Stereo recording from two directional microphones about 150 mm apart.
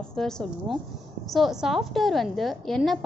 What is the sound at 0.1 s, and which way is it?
A woman's voice, 5° left (ahead or behind).